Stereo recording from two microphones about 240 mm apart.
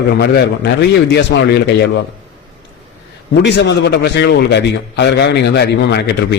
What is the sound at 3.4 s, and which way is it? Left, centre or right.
A man's voice, left.